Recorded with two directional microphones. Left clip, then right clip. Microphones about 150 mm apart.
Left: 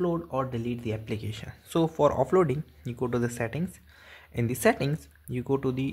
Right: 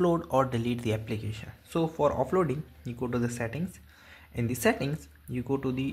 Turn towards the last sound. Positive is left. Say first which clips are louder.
# left 3 dB
turn(degrees=25)  # may be behind; listen again after turning